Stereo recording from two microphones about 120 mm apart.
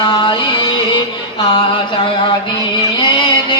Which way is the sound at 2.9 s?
40° left (ahead or behind).